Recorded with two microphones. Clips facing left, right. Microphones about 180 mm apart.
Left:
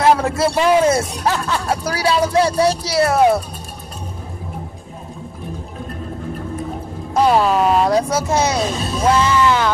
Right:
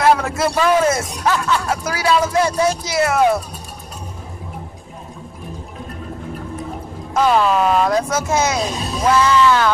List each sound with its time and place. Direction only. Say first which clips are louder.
0.0 s a man's voice: left 1 dB; 30° left (ahead or behind)
7.2 s a man's voice: left 1 dB; 30° left (ahead or behind)